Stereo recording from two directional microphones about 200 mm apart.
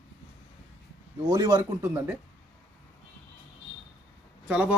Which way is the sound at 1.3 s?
20° right (ahead or behind).